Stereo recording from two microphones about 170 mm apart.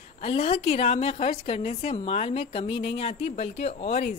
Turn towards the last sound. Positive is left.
turn(degrees=40)  # may be behind; listen again after turning